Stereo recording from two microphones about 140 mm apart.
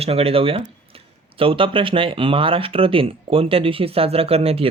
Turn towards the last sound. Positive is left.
turn(degrees=-45)  # may be behind; listen again after turning